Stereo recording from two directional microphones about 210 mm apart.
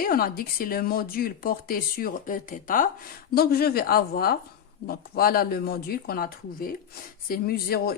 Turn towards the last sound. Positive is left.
turn(degrees=45)  # may be behind; listen again after turning